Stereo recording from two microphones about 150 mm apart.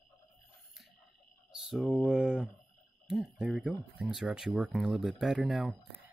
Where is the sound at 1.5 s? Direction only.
Centre (ahead or behind).